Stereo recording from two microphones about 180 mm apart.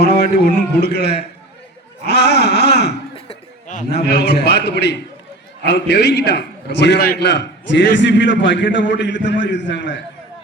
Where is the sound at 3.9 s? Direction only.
65° left (ahead or behind).